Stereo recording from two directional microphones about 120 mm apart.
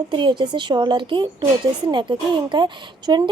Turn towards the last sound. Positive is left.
turn(degrees=-40)  # may be behind; listen again after turning